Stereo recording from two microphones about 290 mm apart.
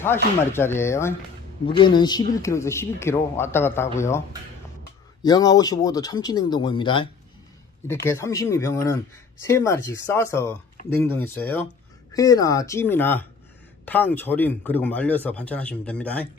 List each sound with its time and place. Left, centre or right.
0.0 s speech: centre
5.2 s a man's voice: centre